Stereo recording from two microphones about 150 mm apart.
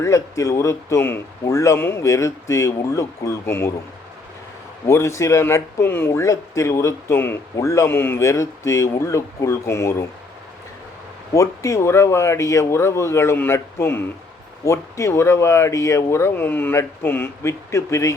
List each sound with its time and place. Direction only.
0.0 s speech: 20° left (ahead or behind)
4.9 s speech: 20° left (ahead or behind)
11.3 s speech: 20° left (ahead or behind)